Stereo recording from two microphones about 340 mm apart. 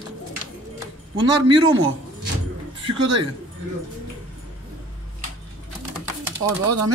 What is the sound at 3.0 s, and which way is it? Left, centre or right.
Speech, right.